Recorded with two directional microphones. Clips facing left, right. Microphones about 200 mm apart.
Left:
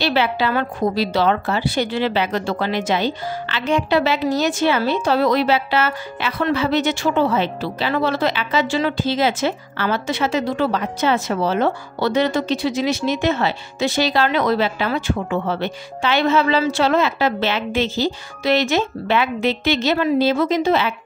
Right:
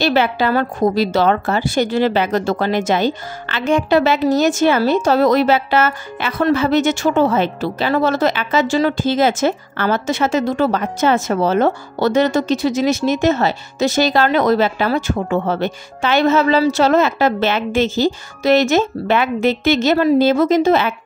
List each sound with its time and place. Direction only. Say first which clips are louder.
0.0 s a woman's voice: right 3 dB; 45° right (ahead or behind)